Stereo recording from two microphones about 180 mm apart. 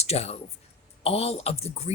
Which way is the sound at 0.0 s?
35° left (ahead or behind).